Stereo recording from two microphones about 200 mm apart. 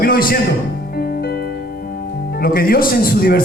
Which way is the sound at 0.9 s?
50° left (ahead or behind).